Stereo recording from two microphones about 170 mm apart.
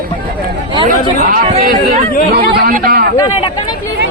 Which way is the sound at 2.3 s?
65° right (ahead or behind).